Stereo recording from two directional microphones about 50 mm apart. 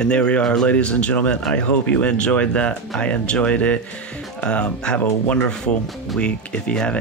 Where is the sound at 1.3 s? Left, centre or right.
Centre.